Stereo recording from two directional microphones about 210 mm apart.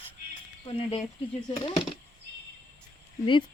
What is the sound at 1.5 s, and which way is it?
Speech, 25° left (ahead or behind).